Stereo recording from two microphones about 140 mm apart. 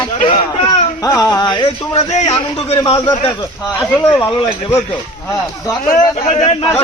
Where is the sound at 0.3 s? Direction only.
45° left (ahead or behind).